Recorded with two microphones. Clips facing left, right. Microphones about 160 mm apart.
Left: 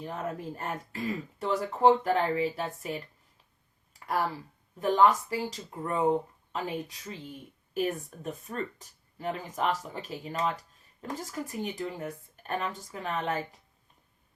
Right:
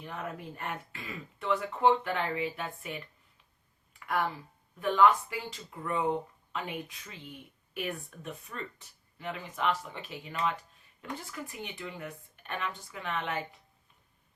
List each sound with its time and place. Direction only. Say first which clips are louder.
0.0 s speech: left 4 dB; 35° left (ahead or behind)
3.9 s a sound: left 1 dB; 35° left (ahead or behind)
4.8 s speech: left 1 dB; 35° left (ahead or behind)